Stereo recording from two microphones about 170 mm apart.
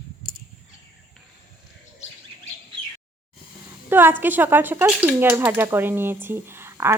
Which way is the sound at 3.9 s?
10° right (ahead or behind).